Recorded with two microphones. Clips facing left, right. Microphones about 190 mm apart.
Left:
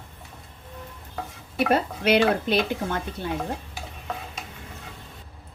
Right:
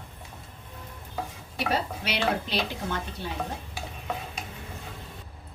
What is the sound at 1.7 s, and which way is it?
Speech, 55° left (ahead or behind).